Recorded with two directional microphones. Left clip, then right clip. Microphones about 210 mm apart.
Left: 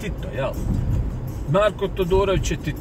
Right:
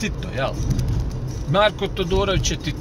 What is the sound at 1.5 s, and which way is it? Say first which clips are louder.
Speech: right 1 dB; 25° right (ahead or behind).